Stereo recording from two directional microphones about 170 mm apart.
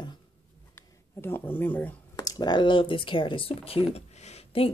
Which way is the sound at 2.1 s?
20° left (ahead or behind).